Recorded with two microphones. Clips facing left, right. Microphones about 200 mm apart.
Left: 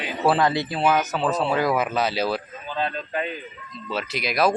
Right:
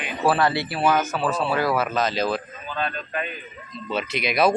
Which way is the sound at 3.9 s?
Centre (ahead or behind).